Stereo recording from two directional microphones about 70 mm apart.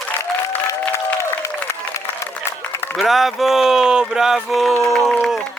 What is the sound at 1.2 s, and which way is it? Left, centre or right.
Applause, left.